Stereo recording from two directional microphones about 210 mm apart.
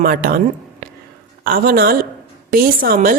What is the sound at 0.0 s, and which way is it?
A woman's voice, 45° right (ahead or behind).